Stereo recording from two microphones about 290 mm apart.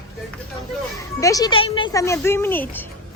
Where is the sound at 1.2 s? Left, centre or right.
Centre.